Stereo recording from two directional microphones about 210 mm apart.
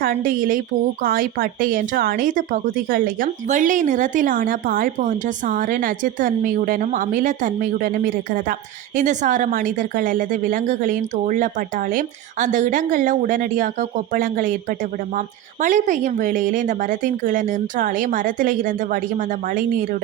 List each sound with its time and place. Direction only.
0.0 s a woman's voice: 40° right (ahead or behind)
15.6 s speech: 35° right (ahead or behind)